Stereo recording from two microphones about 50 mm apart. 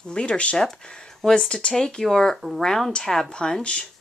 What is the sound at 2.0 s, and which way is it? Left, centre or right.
A woman's voice, centre.